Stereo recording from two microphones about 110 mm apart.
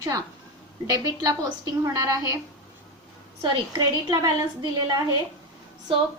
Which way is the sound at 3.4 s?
40° right (ahead or behind).